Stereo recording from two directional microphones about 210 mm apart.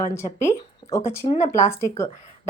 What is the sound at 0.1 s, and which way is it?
Speech, 15° left (ahead or behind).